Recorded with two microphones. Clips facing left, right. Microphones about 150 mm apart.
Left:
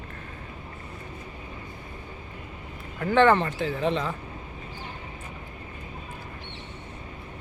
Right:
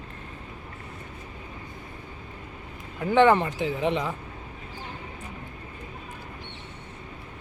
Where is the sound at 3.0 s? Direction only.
15° right (ahead or behind).